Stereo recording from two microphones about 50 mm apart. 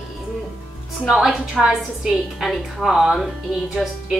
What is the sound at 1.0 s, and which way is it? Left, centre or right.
A woman's voice, centre.